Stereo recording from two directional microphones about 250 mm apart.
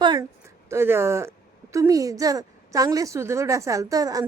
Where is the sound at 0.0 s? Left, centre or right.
Centre.